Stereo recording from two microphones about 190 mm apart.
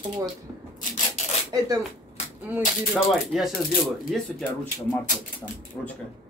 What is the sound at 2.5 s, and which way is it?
Speech, 10° right (ahead or behind).